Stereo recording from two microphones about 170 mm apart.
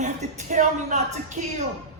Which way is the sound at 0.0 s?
45° right (ahead or behind).